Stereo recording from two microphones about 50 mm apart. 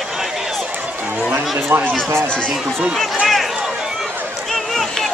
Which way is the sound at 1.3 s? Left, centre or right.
Right.